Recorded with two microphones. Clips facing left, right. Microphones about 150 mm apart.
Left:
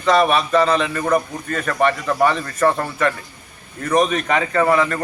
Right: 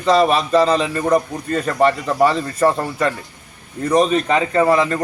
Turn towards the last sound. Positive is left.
turn(degrees=-30)  # may be behind; listen again after turning